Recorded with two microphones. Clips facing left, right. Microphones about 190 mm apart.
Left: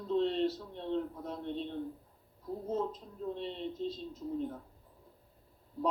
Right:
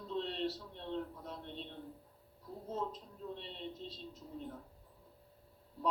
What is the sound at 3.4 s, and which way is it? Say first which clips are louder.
Speech: left 9 dB; 45° left (ahead or behind).